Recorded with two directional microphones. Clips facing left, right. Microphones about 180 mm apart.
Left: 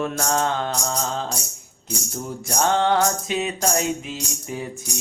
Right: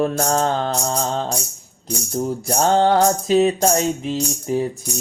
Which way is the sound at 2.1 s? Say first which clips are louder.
Right 6 dB; 35° right (ahead or behind).